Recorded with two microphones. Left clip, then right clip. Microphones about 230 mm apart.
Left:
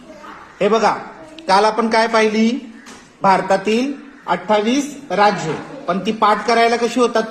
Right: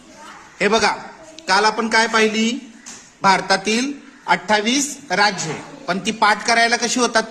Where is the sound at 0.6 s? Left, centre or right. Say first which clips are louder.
Left 2 dB; right.